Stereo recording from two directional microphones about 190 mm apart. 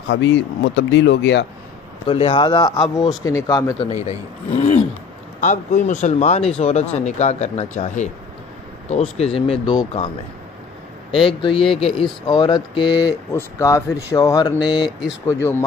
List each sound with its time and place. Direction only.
0.1 s speech: 70° left (ahead or behind)
2.0 s speech: 30° left (ahead or behind)
4.5 s a sound: 35° left (ahead or behind)
5.4 s speech: 40° left (ahead or behind)
11.1 s speech: 30° left (ahead or behind)